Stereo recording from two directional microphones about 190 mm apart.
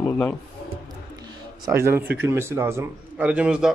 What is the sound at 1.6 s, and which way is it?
Speech, 15° right (ahead or behind).